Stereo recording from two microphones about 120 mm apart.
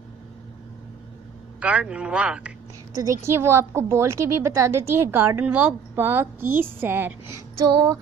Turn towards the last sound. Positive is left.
turn(degrees=-35)  # may be behind; listen again after turning